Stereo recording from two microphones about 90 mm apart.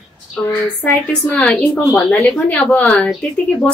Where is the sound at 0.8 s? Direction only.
15° left (ahead or behind).